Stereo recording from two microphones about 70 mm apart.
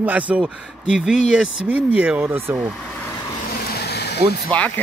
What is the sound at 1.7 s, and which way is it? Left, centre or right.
Speech, right.